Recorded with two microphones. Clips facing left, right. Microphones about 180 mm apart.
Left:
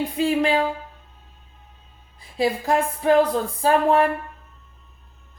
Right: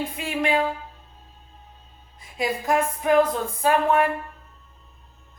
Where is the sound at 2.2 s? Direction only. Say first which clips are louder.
Left 3 dB; 30° left (ahead or behind).